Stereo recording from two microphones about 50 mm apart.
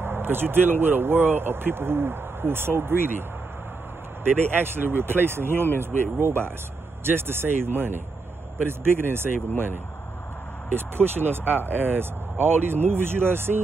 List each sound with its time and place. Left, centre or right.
0.0 s speech: right
10.7 s speech: right